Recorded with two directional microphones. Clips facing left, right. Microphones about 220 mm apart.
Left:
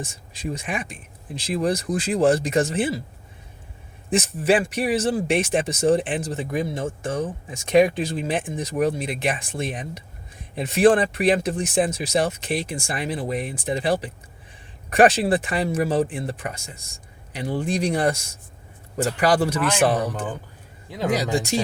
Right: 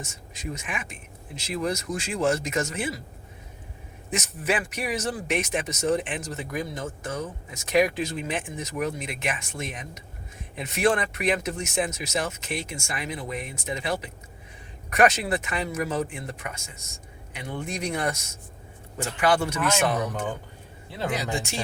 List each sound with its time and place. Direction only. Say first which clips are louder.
0.0 s speech: left 5 dB; 30° left (ahead or behind)
4.1 s speech: left 8 dB; 30° left (ahead or behind)
21.1 s speech: left 8 dB; 35° left (ahead or behind)